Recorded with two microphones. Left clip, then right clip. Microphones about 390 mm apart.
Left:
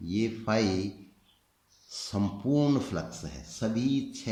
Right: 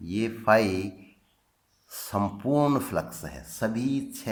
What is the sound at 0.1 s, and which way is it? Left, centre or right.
Speech, centre.